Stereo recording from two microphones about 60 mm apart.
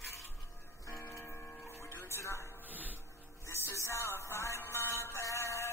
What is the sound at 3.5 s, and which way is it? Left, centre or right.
Music, left.